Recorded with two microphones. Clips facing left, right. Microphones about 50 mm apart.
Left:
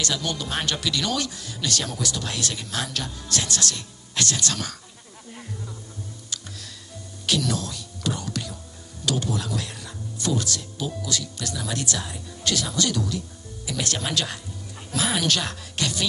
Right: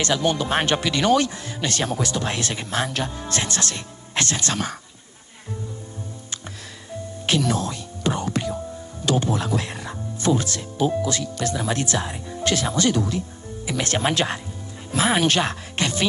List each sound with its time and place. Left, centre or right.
0.0 s speech: right
7.2 s music: right
9.0 s speech: right